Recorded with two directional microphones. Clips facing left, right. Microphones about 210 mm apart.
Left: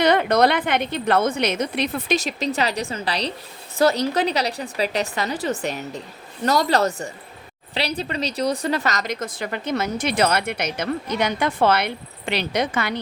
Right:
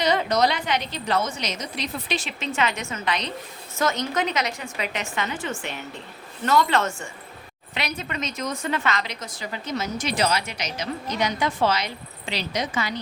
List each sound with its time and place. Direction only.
0.0 s speech: 60° left (ahead or behind)
2.1 s a woman's voice: 40° left (ahead or behind); by 13.0 s 60° left (ahead or behind)